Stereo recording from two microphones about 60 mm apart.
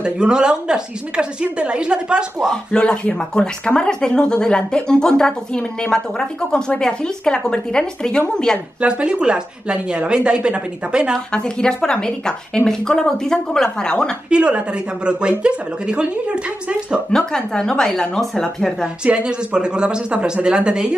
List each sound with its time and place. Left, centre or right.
0.0 s a woman's voice: centre
2.5 s speech: centre
8.8 s a woman's voice: centre
11.3 s speech: centre
14.3 s a woman's voice: centre
17.2 s speech: centre
19.0 s a woman's voice: centre